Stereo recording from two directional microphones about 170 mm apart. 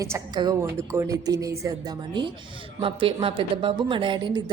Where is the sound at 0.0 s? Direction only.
20° right (ahead or behind).